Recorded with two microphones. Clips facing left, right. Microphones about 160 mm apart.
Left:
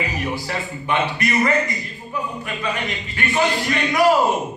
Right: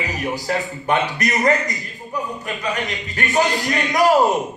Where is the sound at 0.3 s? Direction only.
40° right (ahead or behind).